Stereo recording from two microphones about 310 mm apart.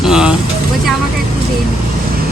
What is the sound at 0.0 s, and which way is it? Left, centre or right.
Vehicle, centre.